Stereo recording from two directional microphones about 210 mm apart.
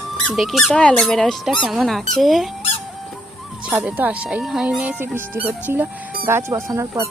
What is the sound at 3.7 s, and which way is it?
Speech, 5° right (ahead or behind).